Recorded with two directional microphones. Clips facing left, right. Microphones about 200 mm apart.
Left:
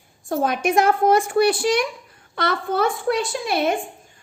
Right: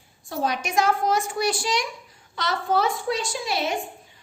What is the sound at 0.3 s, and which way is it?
A woman's voice, 50° left (ahead or behind).